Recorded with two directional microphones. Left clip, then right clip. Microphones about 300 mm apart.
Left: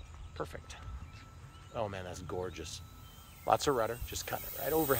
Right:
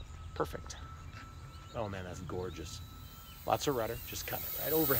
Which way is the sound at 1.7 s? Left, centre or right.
Centre.